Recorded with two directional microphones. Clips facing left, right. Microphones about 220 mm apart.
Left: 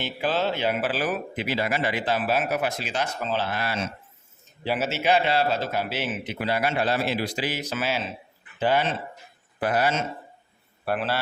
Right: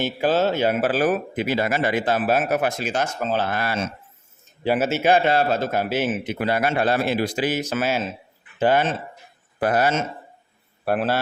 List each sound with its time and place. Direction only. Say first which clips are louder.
0.0 s speech: right 6 dB; 45° right (ahead or behind)